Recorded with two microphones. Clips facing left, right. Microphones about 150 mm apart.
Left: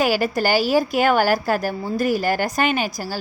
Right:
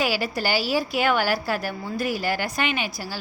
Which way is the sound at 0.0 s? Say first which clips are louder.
Left 5 dB; 45° left (ahead or behind).